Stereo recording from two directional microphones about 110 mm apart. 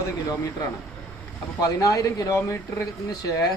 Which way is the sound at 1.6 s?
30° left (ahead or behind).